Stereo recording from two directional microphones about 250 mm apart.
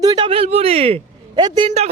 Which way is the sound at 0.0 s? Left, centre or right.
Centre.